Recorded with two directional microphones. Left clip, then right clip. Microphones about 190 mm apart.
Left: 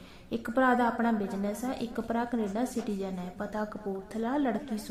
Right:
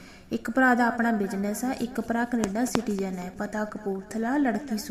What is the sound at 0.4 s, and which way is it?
A woman's voice, 15° right (ahead or behind).